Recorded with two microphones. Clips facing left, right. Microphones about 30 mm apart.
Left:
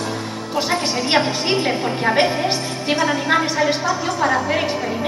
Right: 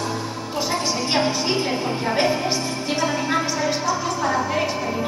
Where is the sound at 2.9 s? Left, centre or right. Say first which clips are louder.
Left 3 dB; centre.